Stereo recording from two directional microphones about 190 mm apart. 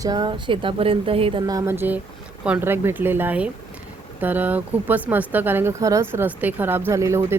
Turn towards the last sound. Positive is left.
turn(degrees=-15)  # may be behind; listen again after turning